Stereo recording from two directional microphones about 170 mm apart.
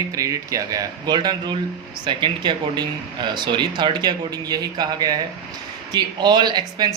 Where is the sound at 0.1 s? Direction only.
20° right (ahead or behind).